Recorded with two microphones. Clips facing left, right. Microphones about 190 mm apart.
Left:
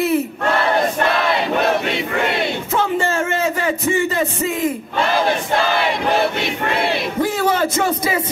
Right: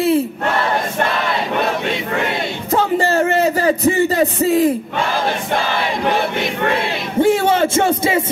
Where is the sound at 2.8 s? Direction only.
35° right (ahead or behind).